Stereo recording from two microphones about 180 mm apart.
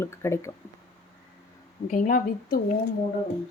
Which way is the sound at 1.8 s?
45° left (ahead or behind).